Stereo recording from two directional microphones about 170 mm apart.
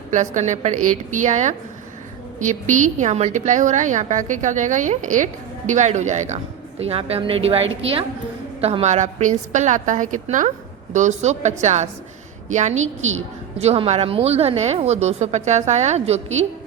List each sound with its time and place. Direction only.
0.1 s a woman's voice: 45° right (ahead or behind)